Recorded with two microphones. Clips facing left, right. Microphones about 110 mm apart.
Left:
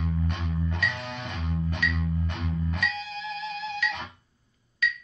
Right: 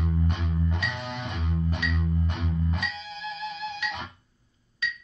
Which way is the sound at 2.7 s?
30° right (ahead or behind).